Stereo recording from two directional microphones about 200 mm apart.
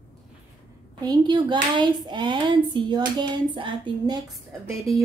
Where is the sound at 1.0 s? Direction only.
20° right (ahead or behind).